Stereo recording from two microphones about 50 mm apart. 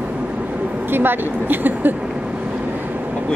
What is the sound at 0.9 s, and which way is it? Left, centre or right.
A woman's voice, right.